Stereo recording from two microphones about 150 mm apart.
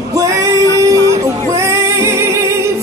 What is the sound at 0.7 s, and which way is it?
Music, 20° right (ahead or behind).